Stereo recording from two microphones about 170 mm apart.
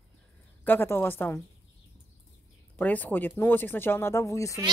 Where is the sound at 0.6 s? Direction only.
15° left (ahead or behind).